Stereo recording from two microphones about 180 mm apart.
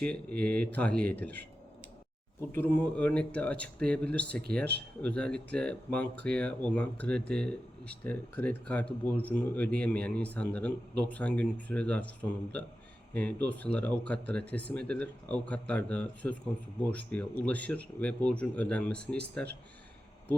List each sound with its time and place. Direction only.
0.0 s speech: 5° left (ahead or behind)
2.5 s speech: 10° left (ahead or behind)
18.9 s speech: 65° right (ahead or behind)